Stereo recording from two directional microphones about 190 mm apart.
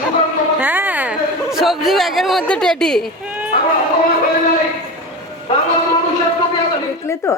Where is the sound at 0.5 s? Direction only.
10° right (ahead or behind).